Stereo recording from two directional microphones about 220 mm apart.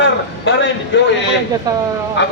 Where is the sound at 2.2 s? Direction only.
55° left (ahead or behind).